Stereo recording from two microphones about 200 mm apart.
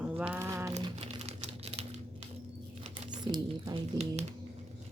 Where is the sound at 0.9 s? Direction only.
30° right (ahead or behind).